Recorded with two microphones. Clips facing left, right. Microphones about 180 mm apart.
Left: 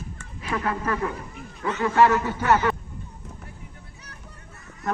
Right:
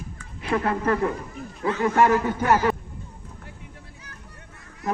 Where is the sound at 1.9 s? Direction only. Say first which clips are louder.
Left 2 dB; 15° right (ahead or behind).